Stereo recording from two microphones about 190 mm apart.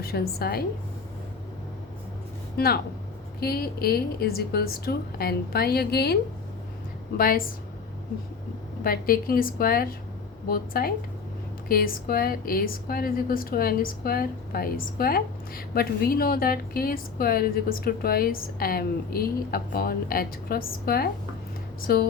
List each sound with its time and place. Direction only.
0.0 s a woman's voice: 55° left (ahead or behind)
2.6 s a woman's voice: 55° left (ahead or behind)
7.2 s a woman's voice: 50° left (ahead or behind)
8.8 s a woman's voice: 50° left (ahead or behind)